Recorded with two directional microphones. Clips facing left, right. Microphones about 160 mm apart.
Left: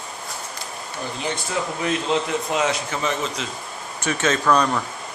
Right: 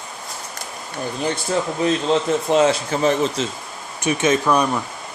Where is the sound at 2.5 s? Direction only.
30° right (ahead or behind).